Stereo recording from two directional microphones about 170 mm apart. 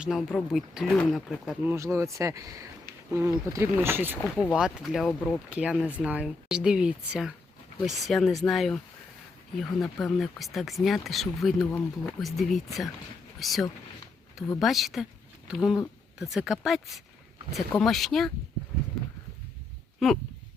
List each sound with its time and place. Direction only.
0.0 s speech: centre (ahead or behind)
1.6 s speech: 15° right (ahead or behind); by 18.3 s centre (ahead or behind)
20.0 s speech: centre (ahead or behind)